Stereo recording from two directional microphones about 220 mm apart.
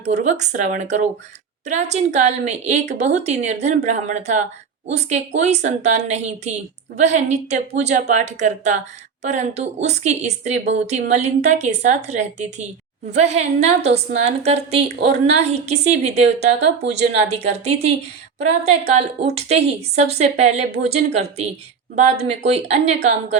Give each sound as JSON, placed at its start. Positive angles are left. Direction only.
{"t": 0.0, "sound": "a woman's voice", "side_deg": -30}